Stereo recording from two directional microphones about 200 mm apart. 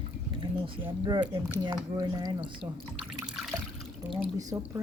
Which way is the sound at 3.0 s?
5° right (ahead or behind).